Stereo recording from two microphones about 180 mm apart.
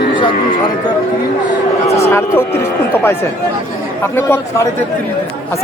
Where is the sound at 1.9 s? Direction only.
35° left (ahead or behind).